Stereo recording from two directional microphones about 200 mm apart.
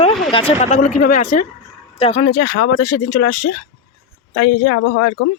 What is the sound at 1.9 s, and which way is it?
Speech, 30° left (ahead or behind).